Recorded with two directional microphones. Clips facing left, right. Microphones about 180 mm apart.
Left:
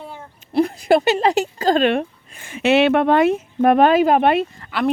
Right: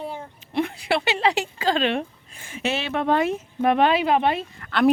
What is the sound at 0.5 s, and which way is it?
Speech, 40° left (ahead or behind).